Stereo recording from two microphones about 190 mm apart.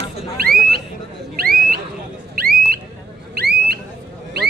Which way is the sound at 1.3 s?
50° right (ahead or behind).